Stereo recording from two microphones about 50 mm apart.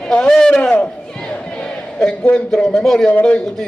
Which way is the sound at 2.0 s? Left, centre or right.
Left.